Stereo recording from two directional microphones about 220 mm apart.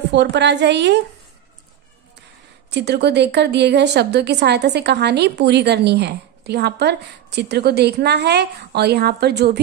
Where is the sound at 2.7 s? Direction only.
50° right (ahead or behind).